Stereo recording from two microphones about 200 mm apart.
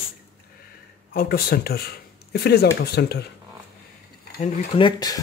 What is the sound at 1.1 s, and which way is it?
Speech, 50° left (ahead or behind).